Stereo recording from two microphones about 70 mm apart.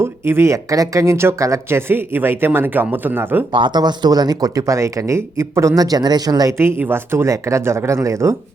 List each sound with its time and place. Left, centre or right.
0.0 s speech: right
1.9 s speech: right
3.7 s speech: right
5.7 s speech: right
6.5 s speech: right